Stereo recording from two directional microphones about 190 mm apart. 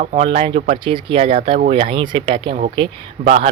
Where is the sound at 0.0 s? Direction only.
40° right (ahead or behind).